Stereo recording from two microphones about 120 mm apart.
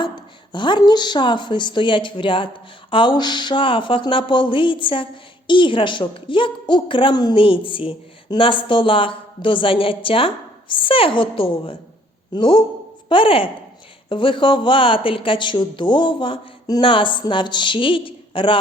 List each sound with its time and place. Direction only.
0.0 s a woman's voice: 40° left (ahead or behind)
7.3 s a woman's voice: 50° left (ahead or behind)